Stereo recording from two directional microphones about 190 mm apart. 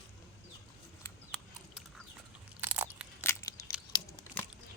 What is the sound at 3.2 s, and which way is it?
Scissors, 15° left (ahead or behind).